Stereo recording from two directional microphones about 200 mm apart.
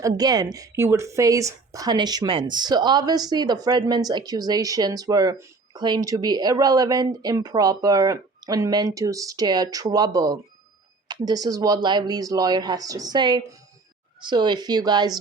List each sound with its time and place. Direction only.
0.2 s a woman's voice: 20° right (ahead or behind)